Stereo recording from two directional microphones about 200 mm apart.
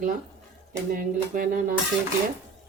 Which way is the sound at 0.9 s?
45° right (ahead or behind).